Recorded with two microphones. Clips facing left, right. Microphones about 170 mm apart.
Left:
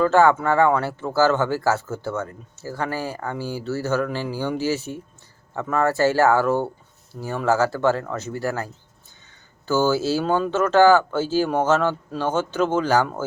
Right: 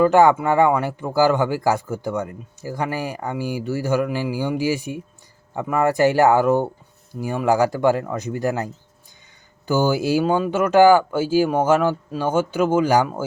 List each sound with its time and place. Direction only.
0.0 s speech: 15° right (ahead or behind)